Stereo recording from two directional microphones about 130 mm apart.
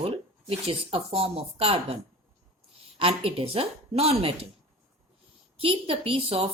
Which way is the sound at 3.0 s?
45° right (ahead or behind).